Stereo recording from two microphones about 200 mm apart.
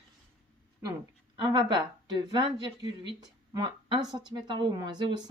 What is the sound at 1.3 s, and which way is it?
Speech, 25° right (ahead or behind).